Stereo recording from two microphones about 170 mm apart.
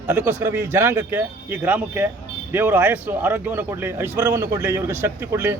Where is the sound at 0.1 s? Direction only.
10° right (ahead or behind).